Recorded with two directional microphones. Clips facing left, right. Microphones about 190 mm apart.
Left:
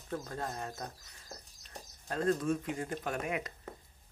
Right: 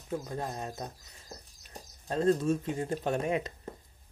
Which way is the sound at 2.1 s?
25° right (ahead or behind).